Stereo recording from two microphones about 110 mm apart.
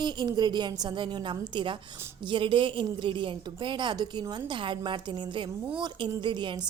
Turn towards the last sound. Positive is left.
turn(degrees=-45)  # may be behind; listen again after turning